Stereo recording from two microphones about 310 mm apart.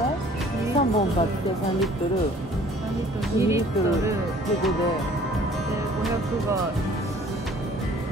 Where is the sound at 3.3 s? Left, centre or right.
Centre.